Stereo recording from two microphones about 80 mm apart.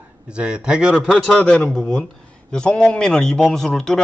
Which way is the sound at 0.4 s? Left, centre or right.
Centre.